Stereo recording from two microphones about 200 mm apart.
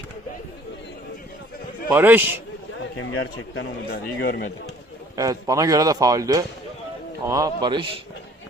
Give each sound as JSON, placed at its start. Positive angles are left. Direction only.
{"t": 1.9, "sound": "a man's voice", "side_deg": -10}
{"t": 3.0, "sound": "a man's voice", "side_deg": 85}
{"t": 3.8, "sound": "a man's voice", "side_deg": 50}
{"t": 5.1, "sound": "a man's voice", "side_deg": -15}